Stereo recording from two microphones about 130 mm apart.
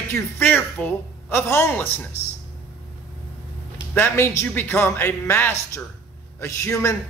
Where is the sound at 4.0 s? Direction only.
20° left (ahead or behind).